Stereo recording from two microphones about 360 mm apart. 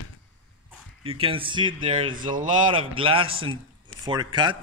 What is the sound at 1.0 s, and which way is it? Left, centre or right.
A man's voice, centre.